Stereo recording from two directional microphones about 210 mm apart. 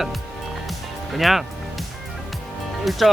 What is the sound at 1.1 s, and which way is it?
Speech, centre (ahead or behind).